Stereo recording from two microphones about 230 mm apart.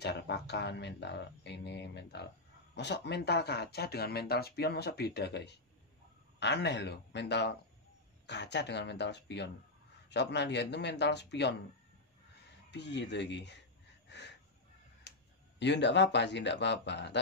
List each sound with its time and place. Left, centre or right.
0.0 s speech: left
12.7 s speech: left
14.0 s a sound: left
15.6 s speech: left